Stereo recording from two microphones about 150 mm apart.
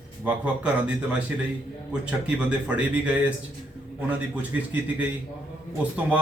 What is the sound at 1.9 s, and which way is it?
A man's voice, 5° right (ahead or behind).